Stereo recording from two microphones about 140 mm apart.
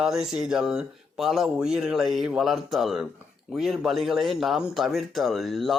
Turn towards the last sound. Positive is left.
turn(degrees=0)  # may be behind; listen again after turning